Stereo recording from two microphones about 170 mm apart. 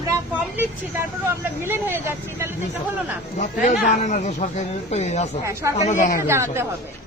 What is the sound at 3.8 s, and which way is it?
Speech, 45° left (ahead or behind).